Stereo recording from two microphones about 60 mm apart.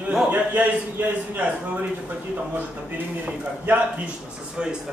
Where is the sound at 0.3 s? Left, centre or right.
Right.